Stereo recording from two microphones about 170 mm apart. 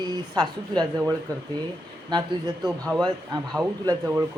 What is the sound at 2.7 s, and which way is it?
Speech, centre (ahead or behind).